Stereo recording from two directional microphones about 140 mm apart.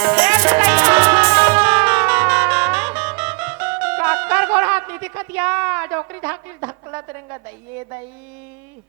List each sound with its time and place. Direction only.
0.0 s music: 10° right (ahead or behind)